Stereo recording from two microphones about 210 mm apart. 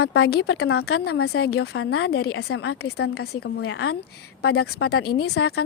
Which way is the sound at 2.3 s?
85° left.